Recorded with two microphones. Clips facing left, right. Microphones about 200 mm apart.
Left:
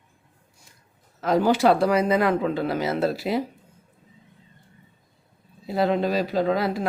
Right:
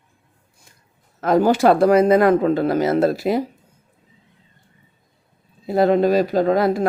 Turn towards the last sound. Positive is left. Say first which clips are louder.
# right 6 dB
turn(degrees=-45)  # may be behind; listen again after turning